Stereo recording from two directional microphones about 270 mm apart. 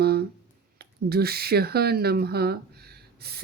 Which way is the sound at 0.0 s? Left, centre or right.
Right.